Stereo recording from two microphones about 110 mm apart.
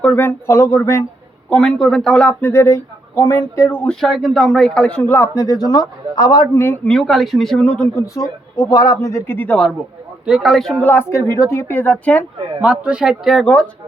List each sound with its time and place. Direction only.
0.0 s speech: 15° left (ahead or behind)
1.5 s speech: 10° left (ahead or behind)
2.5 s speech: 25° left (ahead or behind)
3.7 s speech: 15° left (ahead or behind)
4.0 s speech: centre (ahead or behind); by 6.7 s 25° left (ahead or behind)
6.8 s speech: 5° left (ahead or behind)
7.9 s speech: 30° left (ahead or behind)
10.2 s speech: 5° right (ahead or behind)
10.8 s speech: 20° left (ahead or behind)
11.7 s speech: 15° left (ahead or behind)
12.6 s speech: 10° right (ahead or behind); by 13.7 s 5° left (ahead or behind)